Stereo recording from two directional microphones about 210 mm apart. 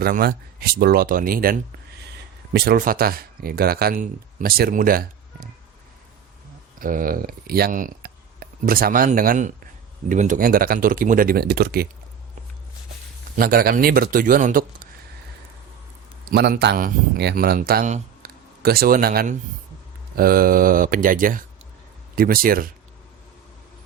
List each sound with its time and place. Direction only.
0.0 s speech: 45° right (ahead or behind)
6.7 s speech: 40° right (ahead or behind)
13.3 s speech: 45° right (ahead or behind)
16.2 s speech: 50° right (ahead or behind)